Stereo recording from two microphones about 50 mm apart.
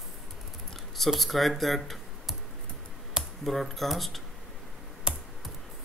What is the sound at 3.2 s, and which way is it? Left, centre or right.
Computer keyboard, centre.